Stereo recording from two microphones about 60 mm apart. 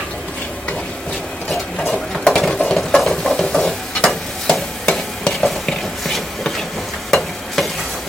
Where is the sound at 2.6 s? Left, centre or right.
Centre.